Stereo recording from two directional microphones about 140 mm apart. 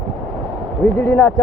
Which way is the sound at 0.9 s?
15° left (ahead or behind).